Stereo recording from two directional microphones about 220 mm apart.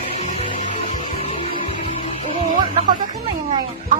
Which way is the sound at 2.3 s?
30° right (ahead or behind).